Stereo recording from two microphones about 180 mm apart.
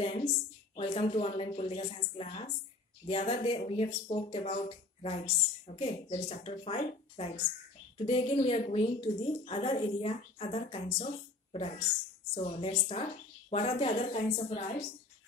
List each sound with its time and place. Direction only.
0.0 s a woman's voice: 35° left (ahead or behind)
12.4 s a woman's voice: 35° left (ahead or behind)